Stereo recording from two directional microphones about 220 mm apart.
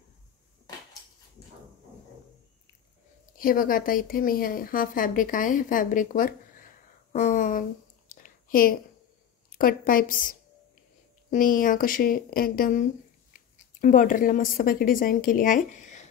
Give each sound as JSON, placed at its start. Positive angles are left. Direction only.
{"t": 3.3, "sound": "a woman's voice", "side_deg": 40}
{"t": 8.1, "sound": "a sound", "side_deg": 40}
{"t": 9.5, "sound": "a woman's voice", "side_deg": 40}
{"t": 11.2, "sound": "a woman's voice", "side_deg": 40}